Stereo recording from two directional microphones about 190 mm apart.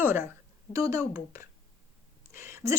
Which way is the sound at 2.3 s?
15° right (ahead or behind).